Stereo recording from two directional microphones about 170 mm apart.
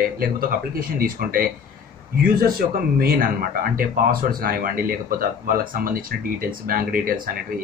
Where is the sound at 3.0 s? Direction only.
60° right (ahead or behind).